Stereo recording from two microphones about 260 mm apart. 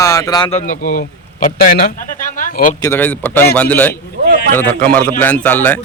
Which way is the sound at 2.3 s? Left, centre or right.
Left.